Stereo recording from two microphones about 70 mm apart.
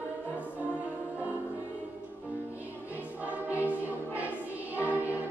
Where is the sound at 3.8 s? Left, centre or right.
Right.